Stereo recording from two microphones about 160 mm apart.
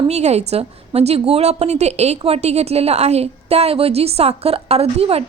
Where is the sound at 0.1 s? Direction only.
45° right (ahead or behind).